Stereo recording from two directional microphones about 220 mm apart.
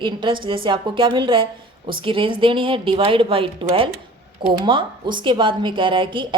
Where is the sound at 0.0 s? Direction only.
20° right (ahead or behind).